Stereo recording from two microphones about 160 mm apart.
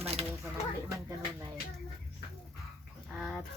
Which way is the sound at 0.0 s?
40° right (ahead or behind).